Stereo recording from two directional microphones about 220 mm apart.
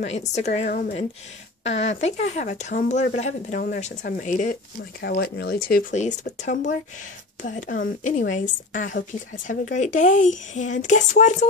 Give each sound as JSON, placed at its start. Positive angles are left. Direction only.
{"t": 0.1, "sound": "speech", "side_deg": 30}
{"t": 5.0, "sound": "speech", "side_deg": 45}